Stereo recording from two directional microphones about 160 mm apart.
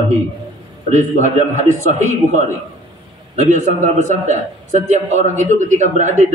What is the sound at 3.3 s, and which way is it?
A man's voice, 45° right (ahead or behind).